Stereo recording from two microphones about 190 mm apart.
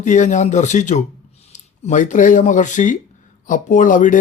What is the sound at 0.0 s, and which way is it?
A man's voice, 40° left (ahead or behind).